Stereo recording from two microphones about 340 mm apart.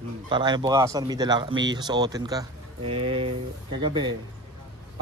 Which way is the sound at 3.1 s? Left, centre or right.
Centre.